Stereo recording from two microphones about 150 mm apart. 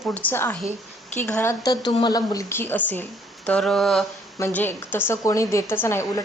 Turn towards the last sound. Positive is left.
turn(degrees=15)  # may be behind; listen again after turning